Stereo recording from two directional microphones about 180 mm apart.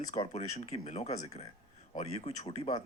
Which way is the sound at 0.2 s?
40° left (ahead or behind).